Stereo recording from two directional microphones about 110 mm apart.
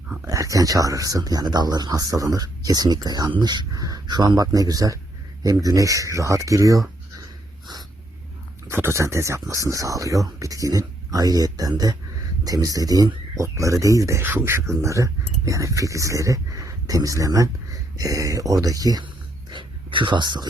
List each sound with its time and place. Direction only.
0.3 s speech: 30° right (ahead or behind)
8.6 s speech: 25° right (ahead or behind)
19.5 s speech: 45° right (ahead or behind)